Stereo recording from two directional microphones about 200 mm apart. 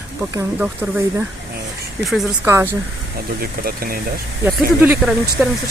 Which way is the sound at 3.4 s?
45° right (ahead or behind).